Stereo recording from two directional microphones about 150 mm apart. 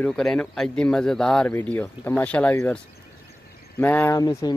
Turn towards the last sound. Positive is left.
turn(degrees=25)  # may be behind; listen again after turning